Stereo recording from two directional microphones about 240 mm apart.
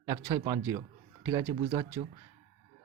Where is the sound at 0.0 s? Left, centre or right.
Centre.